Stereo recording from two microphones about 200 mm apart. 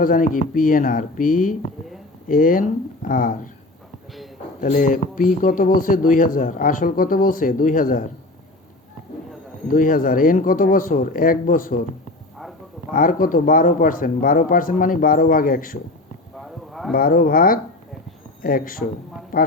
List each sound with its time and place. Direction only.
0.0 s speech: 45° left (ahead or behind)
4.6 s speech: 40° left (ahead or behind)
9.6 s speech: 45° left (ahead or behind)
12.9 s speech: 45° left (ahead or behind)
16.4 s a sound: centre (ahead or behind)
16.9 s speech: 45° left (ahead or behind)